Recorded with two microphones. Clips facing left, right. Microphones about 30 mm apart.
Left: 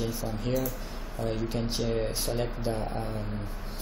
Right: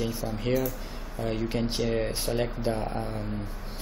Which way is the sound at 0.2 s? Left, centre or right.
Centre.